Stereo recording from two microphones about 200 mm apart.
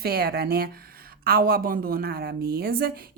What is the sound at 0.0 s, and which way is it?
Speech, 50° right (ahead or behind).